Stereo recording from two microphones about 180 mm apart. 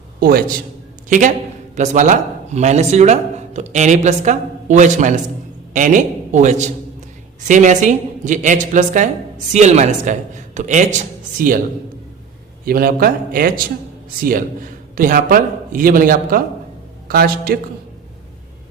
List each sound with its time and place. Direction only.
0.2 s a man's voice: 55° right (ahead or behind)
1.7 s a man's voice: 40° right (ahead or behind)
12.6 s a man's voice: 55° right (ahead or behind)